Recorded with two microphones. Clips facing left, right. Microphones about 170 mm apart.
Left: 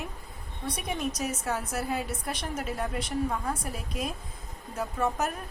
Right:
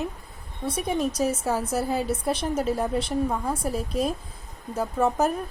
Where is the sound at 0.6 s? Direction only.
30° right (ahead or behind).